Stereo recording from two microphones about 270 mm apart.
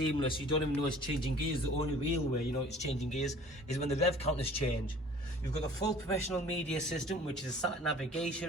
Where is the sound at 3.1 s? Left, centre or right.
Left.